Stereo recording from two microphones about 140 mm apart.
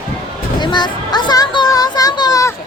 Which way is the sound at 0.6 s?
30° left (ahead or behind).